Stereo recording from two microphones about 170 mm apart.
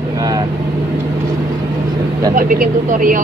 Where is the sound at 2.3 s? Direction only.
55° right (ahead or behind).